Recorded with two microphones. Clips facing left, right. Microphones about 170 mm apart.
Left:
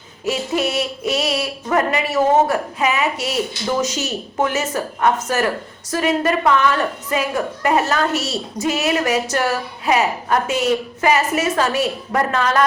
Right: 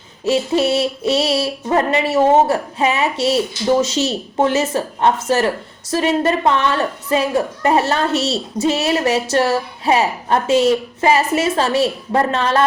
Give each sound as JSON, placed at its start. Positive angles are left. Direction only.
{"t": 0.3, "sound": "a woman's voice", "side_deg": -30}